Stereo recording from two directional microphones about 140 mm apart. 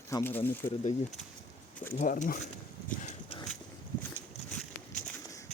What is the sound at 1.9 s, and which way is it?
Speech, 70° left (ahead or behind).